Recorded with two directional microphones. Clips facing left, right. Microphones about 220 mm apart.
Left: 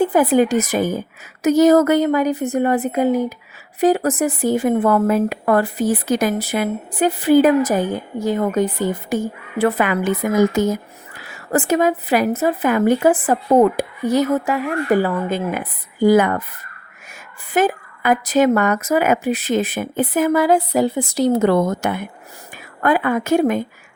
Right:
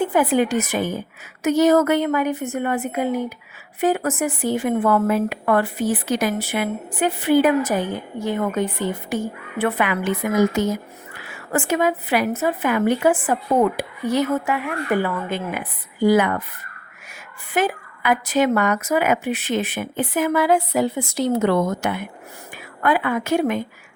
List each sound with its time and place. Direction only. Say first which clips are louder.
0.0 s a woman's voice: left 4 dB; 40° left (ahead or behind)
17.5 s a woman's voice: left 4 dB; 45° left (ahead or behind)